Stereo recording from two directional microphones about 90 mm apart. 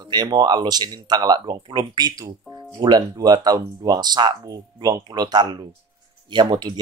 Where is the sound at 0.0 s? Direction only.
50° right (ahead or behind).